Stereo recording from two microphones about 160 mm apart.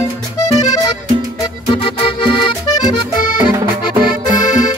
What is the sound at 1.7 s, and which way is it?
Music, 35° left (ahead or behind).